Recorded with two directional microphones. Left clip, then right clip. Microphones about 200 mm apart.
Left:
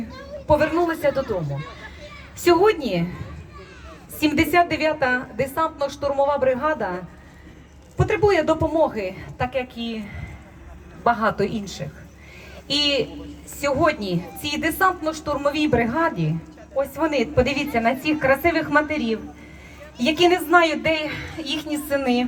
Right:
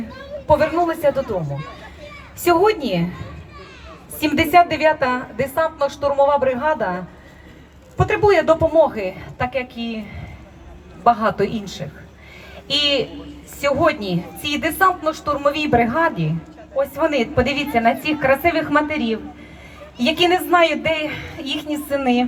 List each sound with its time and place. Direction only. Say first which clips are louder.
0.4 s a woman's voice: right 3 dB; 15° left (ahead or behind)
4.2 s a woman's voice: right 4 dB; 20° left (ahead or behind)
11.0 s a woman's voice: right 4 dB; 15° left (ahead or behind)